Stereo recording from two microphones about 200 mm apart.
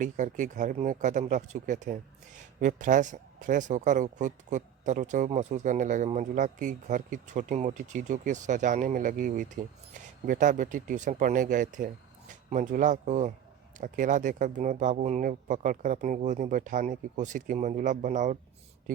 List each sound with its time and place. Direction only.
0.0 s speech: 40° right (ahead or behind)